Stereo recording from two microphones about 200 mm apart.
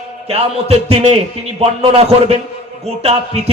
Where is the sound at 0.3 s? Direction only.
30° right (ahead or behind).